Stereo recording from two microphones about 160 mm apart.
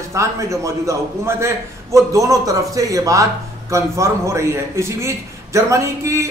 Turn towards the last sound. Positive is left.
turn(degrees=-20)  # may be behind; listen again after turning